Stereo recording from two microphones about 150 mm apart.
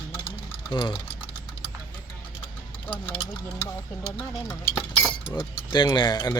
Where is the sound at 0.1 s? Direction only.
35° left (ahead or behind).